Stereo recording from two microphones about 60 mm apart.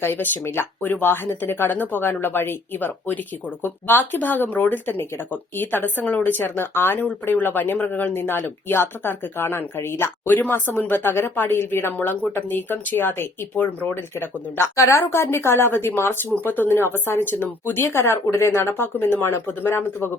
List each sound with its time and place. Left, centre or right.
0.0 s speech: left
13.5 s speech: centre
13.9 s speech: left
14.8 s speech: left